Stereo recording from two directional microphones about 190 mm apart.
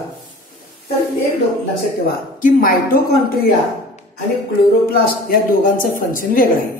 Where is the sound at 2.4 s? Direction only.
45° left (ahead or behind).